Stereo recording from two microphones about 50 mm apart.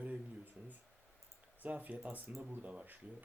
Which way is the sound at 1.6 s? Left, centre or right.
Right.